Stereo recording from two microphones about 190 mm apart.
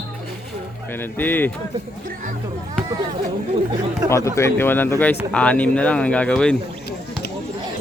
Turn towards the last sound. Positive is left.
turn(degrees=5)  # may be behind; listen again after turning